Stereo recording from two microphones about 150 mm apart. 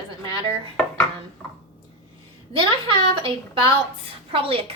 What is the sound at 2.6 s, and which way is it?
A woman's voice, 35° right (ahead or behind).